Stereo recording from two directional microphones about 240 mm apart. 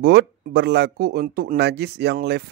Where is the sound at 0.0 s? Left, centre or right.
Right.